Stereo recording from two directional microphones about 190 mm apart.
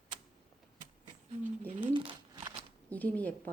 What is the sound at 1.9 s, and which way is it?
Crumpling, 25° right (ahead or behind).